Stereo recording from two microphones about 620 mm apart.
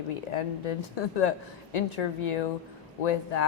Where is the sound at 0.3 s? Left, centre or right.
Left.